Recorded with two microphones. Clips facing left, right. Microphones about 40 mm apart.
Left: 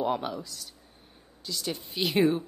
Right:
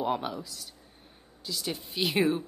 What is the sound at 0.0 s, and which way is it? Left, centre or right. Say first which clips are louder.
A woman's voice: left 1 dB; centre.